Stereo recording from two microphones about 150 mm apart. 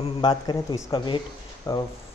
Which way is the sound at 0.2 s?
30° left (ahead or behind).